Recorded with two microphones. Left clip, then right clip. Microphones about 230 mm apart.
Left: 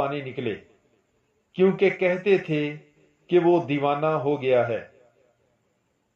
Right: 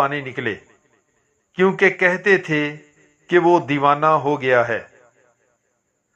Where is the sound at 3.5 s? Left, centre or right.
Centre.